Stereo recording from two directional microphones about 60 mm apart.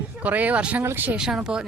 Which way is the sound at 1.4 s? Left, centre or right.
Centre.